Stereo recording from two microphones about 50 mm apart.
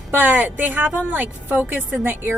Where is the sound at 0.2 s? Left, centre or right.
Right.